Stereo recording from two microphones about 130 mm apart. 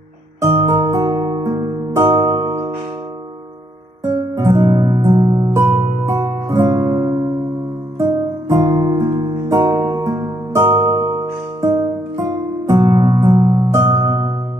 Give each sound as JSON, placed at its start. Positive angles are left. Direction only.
{"t": 0.4, "sound": "music", "side_deg": -25}
{"t": 4.4, "sound": "music", "side_deg": -25}
{"t": 8.5, "sound": "music", "side_deg": -25}